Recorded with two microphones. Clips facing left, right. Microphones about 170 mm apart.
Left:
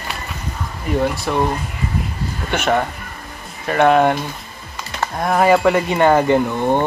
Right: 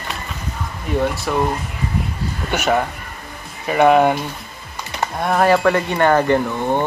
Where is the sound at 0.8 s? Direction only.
Centre (ahead or behind).